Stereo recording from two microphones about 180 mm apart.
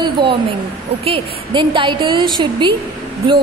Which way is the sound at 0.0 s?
25° right (ahead or behind).